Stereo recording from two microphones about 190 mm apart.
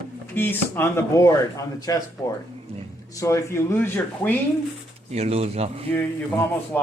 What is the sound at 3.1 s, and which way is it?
Speech, 15° left (ahead or behind).